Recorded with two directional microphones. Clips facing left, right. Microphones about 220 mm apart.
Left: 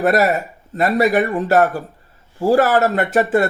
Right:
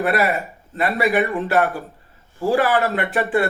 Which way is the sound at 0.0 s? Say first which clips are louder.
Left 4 dB; 45° left (ahead or behind).